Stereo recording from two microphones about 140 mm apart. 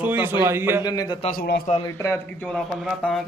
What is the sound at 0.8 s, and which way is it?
Speech, 30° left (ahead or behind).